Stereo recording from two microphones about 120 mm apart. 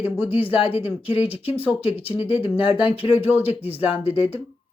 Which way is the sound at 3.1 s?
15° right (ahead or behind).